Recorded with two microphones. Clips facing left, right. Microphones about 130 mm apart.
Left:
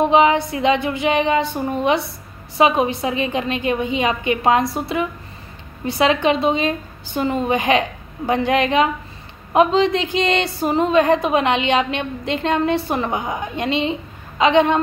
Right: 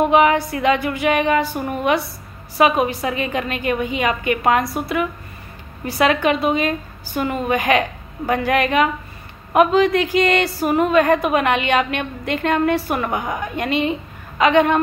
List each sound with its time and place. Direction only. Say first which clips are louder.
0.1 s a woman's voice: even; 25° left (ahead or behind)
2.8 s a woman's voice: left 1 dB; 25° left (ahead or behind)